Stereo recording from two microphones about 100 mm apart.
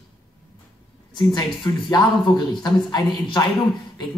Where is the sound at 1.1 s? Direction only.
45° left (ahead or behind).